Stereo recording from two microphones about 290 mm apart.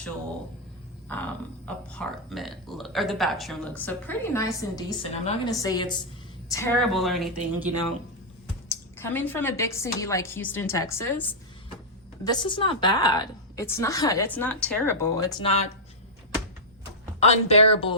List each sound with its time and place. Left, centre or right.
1.1 s speech: centre
8.7 s a woman's voice: centre
17.2 s speech: left